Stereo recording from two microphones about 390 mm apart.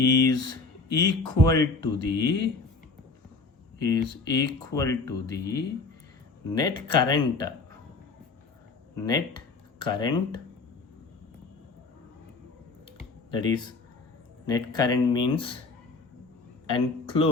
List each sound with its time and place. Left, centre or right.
0.0 s speech: centre
3.8 s speech: centre
9.0 s speech: centre
13.3 s speech: centre
16.6 s speech: centre